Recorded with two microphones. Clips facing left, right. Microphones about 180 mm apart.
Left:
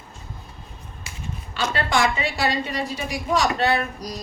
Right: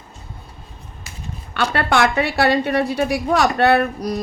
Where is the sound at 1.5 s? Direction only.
60° right (ahead or behind).